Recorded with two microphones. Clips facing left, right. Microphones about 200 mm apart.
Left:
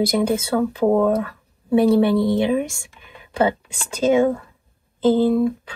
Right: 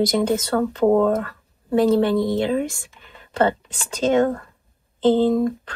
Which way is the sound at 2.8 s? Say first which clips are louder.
Left 2 dB; 15° left (ahead or behind).